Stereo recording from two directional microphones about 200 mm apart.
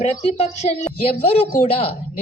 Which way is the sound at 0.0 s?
30° left (ahead or behind).